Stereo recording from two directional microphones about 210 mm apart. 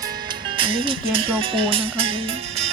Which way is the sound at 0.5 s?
25° right (ahead or behind).